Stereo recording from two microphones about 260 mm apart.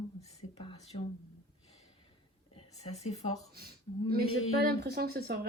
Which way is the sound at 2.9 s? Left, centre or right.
Left.